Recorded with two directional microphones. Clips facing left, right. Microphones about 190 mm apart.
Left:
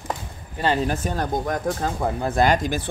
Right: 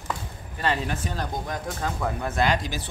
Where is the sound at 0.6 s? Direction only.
35° left (ahead or behind).